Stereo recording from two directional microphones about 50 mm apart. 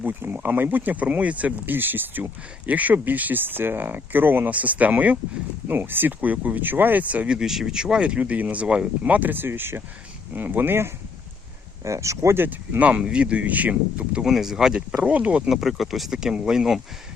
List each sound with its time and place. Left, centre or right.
0.0 s speech: right
1.0 s speech: right
4.5 s speech: right
5.6 s speech: right
7.3 s speech: centre
8.2 s speech: right
11.8 s speech: right
13.0 s speech: centre
14.3 s speech: centre
15.0 s speech: right
15.4 s speech: centre
16.1 s speech: centre